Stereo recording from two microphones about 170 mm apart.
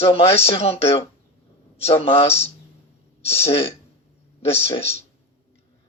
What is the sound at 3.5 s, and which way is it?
Speech, 35° left (ahead or behind).